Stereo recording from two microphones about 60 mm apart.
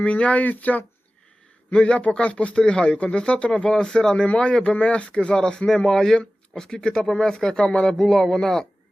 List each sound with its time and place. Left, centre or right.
0.0 s speech: centre
1.7 s speech: centre